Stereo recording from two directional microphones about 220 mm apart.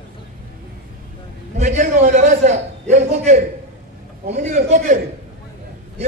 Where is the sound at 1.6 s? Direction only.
35° right (ahead or behind).